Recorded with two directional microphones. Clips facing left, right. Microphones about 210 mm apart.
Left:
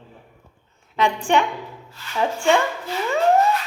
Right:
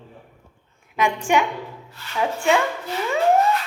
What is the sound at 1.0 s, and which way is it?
Speech, 10° right (ahead or behind).